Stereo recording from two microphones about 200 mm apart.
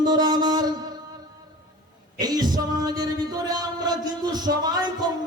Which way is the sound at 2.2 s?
20° right (ahead or behind).